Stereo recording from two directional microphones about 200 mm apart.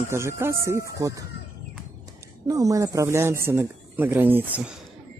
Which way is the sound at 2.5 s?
15° right (ahead or behind).